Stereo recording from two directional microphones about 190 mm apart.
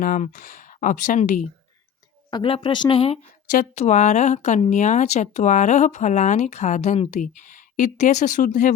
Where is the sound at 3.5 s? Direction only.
40° left (ahead or behind).